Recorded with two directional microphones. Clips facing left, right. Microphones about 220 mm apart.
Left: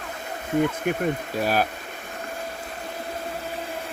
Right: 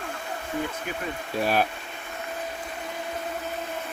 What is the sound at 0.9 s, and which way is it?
Speech, 55° left (ahead or behind).